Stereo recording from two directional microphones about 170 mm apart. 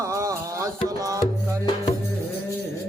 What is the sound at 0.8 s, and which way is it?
Tabla, 20° right (ahead or behind).